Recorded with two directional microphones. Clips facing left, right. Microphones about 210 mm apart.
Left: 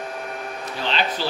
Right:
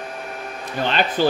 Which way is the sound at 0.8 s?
50° right (ahead or behind).